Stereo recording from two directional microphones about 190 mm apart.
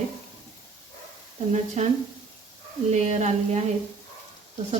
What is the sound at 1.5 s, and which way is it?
Speech, 35° right (ahead or behind).